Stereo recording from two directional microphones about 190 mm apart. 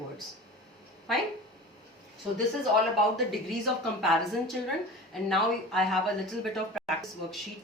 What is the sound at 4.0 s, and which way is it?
Speech, centre (ahead or behind).